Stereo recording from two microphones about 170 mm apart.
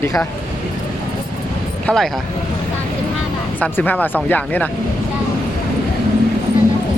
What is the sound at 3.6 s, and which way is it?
Speech, 10° left (ahead or behind).